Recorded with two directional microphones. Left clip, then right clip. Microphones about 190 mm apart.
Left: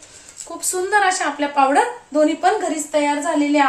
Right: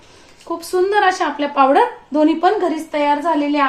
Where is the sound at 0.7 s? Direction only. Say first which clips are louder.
Right 2 dB; 25° right (ahead or behind).